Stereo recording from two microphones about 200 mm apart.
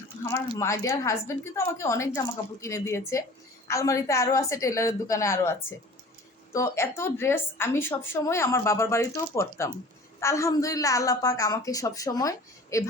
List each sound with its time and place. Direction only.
0.5 s a woman's voice: 15° left (ahead or behind)